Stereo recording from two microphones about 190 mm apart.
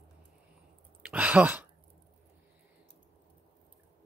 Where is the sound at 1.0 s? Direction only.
5° right (ahead or behind).